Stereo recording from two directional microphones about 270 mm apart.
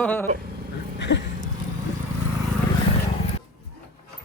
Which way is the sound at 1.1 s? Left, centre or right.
Left.